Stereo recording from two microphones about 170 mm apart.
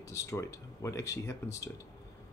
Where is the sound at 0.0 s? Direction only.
20° left (ahead or behind).